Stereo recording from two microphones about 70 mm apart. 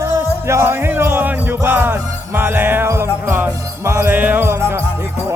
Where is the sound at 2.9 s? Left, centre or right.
Right.